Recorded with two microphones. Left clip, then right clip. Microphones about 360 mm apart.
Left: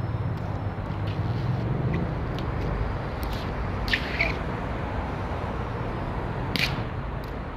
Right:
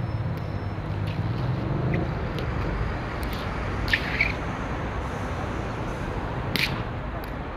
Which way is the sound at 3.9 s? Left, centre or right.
Centre.